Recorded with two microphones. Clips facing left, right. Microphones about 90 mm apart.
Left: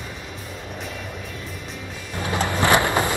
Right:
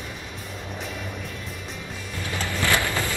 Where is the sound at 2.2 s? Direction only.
20° left (ahead or behind).